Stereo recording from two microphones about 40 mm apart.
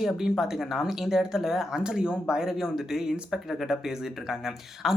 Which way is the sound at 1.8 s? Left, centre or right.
Right.